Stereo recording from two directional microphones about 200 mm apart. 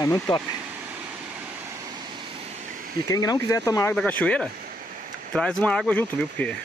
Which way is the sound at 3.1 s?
15° left (ahead or behind).